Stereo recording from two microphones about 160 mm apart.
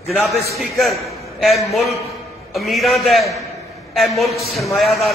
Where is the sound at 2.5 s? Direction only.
Centre (ahead or behind).